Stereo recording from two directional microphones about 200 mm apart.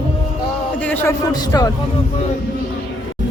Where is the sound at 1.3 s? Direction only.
20° left (ahead or behind).